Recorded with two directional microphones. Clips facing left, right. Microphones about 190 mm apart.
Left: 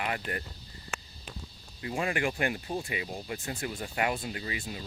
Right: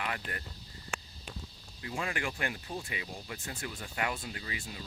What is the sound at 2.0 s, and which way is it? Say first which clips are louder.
Speech: left 6 dB; 15° left (ahead or behind).